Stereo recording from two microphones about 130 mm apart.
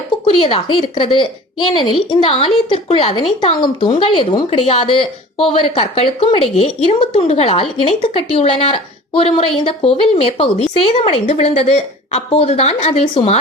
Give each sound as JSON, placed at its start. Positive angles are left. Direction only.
{"t": 0.3, "sound": "a woman's voice", "side_deg": 45}
{"t": 4.4, "sound": "speech", "side_deg": 50}